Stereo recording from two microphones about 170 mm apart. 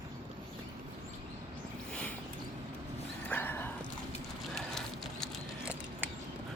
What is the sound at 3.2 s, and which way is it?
Dog, 10° left (ahead or behind).